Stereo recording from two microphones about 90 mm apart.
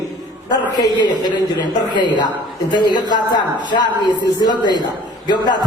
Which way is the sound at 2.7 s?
55° left (ahead or behind).